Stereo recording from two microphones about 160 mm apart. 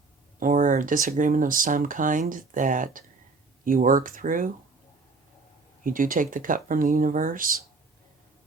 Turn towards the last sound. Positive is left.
turn(degrees=-60)  # may be behind; listen again after turning